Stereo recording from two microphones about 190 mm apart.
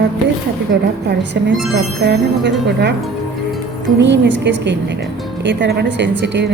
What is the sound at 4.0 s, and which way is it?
A woman's voice, 70° right (ahead or behind).